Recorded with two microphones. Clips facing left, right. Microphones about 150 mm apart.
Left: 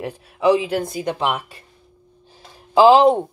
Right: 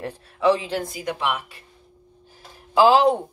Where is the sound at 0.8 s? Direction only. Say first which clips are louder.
Left 4 dB; 30° left (ahead or behind).